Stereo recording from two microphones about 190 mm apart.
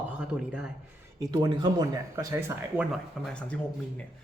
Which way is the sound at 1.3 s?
20° right (ahead or behind).